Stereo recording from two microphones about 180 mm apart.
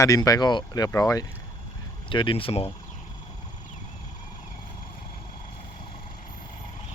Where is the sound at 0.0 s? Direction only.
20° left (ahead or behind).